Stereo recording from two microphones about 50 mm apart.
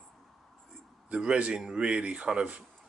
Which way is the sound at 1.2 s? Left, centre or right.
Right.